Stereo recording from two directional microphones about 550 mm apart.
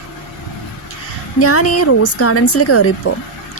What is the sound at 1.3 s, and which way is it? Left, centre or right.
Speech, left.